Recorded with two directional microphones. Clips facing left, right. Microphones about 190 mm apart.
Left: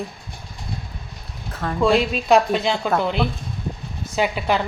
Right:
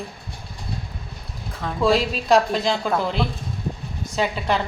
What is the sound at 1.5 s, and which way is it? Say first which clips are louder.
A woman's voice: left 2 dB; centre (ahead or behind).